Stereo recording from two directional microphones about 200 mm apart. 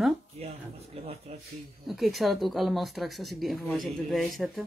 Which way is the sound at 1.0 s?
30° right (ahead or behind).